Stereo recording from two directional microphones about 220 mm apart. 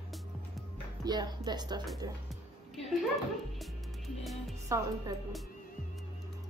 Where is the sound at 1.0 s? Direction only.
20° right (ahead or behind).